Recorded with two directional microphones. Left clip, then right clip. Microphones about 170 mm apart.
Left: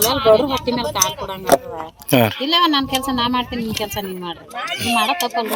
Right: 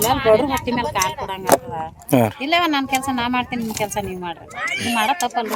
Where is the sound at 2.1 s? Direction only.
20° right (ahead or behind).